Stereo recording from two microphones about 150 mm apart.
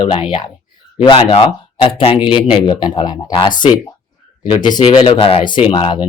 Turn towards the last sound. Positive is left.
turn(degrees=30)  # may be behind; listen again after turning